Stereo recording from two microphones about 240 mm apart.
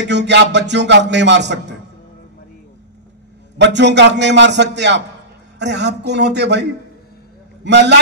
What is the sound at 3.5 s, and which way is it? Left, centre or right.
A man's voice, right.